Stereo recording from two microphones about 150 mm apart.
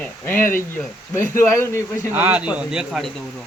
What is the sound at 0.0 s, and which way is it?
Speech, 15° left (ahead or behind).